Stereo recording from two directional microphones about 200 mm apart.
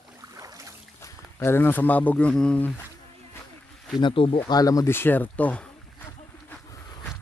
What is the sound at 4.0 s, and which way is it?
Speech, 25° left (ahead or behind).